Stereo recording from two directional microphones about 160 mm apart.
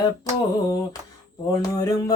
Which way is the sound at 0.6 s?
25° left (ahead or behind).